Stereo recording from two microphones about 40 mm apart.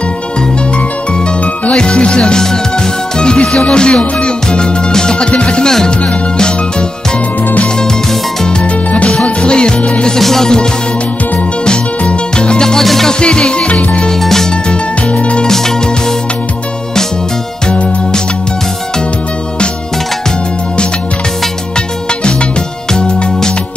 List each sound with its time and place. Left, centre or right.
1.7 s music: left
9.2 s music: left
10.0 s music: centre
12.0 s music: left
12.8 s music: centre
13.2 s music: left
14.2 s music: centre
15.1 s music: left